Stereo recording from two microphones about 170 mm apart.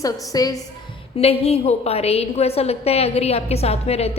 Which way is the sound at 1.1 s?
35° left (ahead or behind).